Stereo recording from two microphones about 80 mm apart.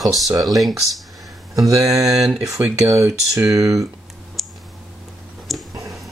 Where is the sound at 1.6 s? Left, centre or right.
Right.